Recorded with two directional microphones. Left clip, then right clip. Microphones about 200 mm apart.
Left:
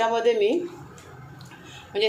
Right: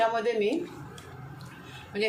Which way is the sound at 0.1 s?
40° left (ahead or behind).